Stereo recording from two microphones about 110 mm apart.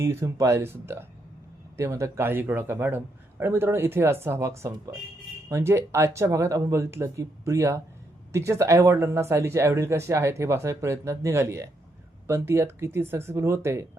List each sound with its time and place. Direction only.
0.0 s speech: 25° right (ahead or behind)